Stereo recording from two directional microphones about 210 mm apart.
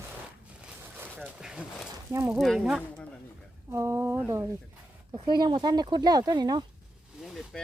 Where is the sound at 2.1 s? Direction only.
10° right (ahead or behind).